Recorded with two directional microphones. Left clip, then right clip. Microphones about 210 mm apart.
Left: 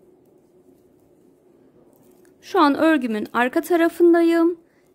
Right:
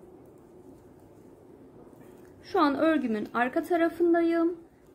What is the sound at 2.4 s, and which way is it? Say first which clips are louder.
A woman's voice: left 8 dB; 45° left (ahead or behind).